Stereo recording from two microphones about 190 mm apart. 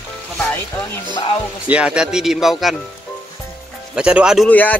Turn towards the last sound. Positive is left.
turn(degrees=10)  # may be behind; listen again after turning